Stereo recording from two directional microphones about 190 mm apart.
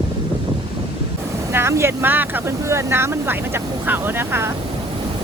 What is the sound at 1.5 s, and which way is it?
Speech, 15° right (ahead or behind).